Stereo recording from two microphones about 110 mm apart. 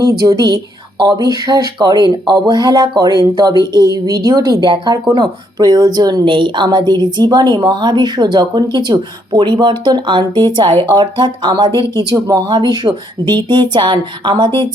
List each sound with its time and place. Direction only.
0.0 s speech: 30° right (ahead or behind)
0.9 s speech: 50° right (ahead or behind)
1.2 s speech: 35° right (ahead or behind)
11.7 s speech: 25° left (ahead or behind)
12.1 s speech: 35° right (ahead or behind)